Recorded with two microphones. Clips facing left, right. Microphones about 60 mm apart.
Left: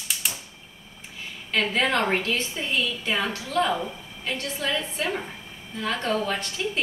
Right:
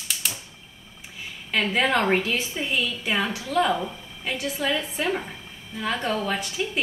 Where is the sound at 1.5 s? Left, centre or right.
Centre.